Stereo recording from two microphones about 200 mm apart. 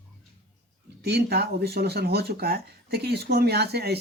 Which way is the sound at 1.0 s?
55° right (ahead or behind).